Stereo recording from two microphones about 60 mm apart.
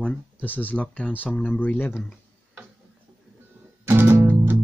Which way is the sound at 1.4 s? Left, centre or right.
Left.